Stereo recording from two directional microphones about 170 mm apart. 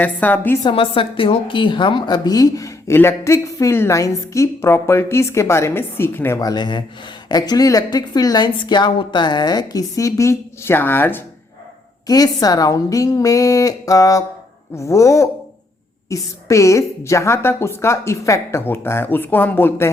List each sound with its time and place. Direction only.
0.0 s a woman's voice: 10° left (ahead or behind)
0.6 s a woman's voice: 30° left (ahead or behind); by 11.2 s 10° left (ahead or behind)
12.0 s a woman's voice: 20° left (ahead or behind)